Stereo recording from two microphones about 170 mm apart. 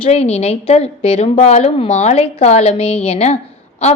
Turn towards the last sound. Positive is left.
turn(degrees=35)  # may be behind; listen again after turning